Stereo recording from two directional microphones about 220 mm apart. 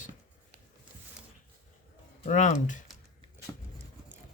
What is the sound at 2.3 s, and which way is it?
Speech, 35° left (ahead or behind).